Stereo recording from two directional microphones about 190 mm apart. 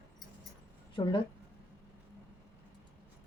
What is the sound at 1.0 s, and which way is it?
Speech, 25° left (ahead or behind).